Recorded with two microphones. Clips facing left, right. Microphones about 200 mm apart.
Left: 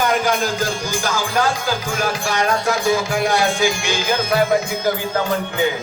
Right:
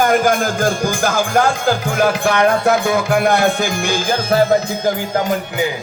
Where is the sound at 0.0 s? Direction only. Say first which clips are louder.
Right 4 dB; 50° right (ahead or behind).